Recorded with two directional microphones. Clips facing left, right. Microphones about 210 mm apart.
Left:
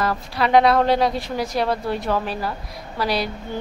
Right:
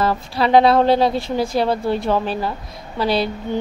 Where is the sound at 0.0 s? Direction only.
30° right (ahead or behind).